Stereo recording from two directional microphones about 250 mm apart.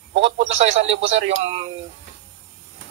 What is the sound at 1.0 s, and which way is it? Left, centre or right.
Speech, right.